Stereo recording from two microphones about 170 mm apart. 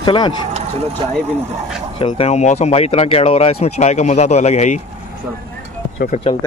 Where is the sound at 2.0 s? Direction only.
35° left (ahead or behind).